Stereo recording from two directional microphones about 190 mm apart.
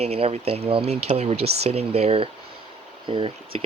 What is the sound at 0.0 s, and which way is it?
Speech, 30° right (ahead or behind).